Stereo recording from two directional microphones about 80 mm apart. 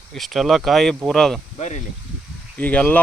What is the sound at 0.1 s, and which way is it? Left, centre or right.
Speech, centre.